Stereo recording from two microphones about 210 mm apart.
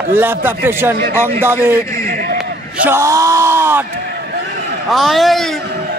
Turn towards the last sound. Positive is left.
turn(degrees=0)  # may be behind; listen again after turning